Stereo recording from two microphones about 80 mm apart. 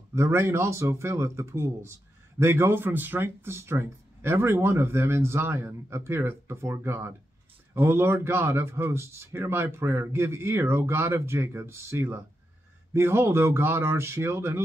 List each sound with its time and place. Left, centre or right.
0.1 s speech: right